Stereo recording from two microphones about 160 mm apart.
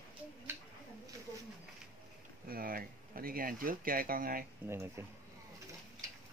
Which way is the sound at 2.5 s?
65° right (ahead or behind).